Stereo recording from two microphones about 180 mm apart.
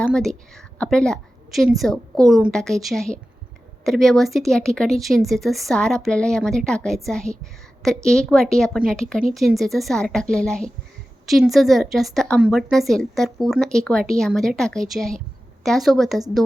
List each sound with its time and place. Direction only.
0.0 s a woman's voice: 5° left (ahead or behind)